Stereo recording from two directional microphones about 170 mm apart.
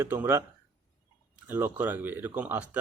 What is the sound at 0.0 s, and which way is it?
Speech, 15° right (ahead or behind).